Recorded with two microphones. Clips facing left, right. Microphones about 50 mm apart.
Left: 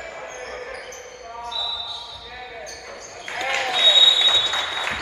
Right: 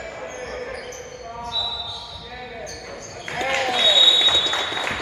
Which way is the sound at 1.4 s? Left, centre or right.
Left.